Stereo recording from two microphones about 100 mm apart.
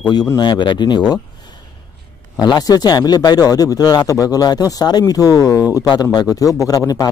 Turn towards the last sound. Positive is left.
turn(degrees=40)  # may be behind; listen again after turning